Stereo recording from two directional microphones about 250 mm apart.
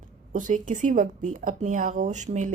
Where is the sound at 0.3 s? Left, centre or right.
Right.